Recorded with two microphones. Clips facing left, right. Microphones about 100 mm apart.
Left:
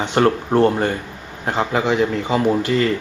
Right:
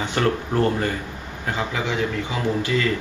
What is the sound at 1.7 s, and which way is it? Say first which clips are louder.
Speech: left 9 dB; 50° left (ahead or behind).